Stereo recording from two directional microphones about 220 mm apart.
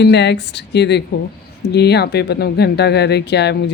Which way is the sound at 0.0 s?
50° left (ahead or behind).